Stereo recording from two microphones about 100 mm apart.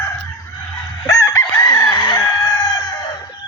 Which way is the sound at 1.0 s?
35° left (ahead or behind).